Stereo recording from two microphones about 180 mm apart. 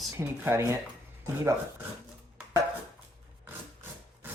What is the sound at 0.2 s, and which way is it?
Speech, 15° right (ahead or behind).